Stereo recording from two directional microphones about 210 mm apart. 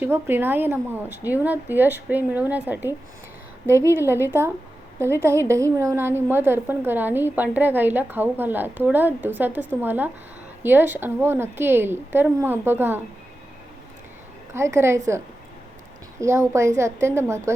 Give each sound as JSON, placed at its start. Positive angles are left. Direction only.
{"t": 0.0, "sound": "a woman's voice", "side_deg": -10}
{"t": 14.5, "sound": "a woman's voice", "side_deg": -15}
{"t": 16.2, "sound": "a woman's voice", "side_deg": -15}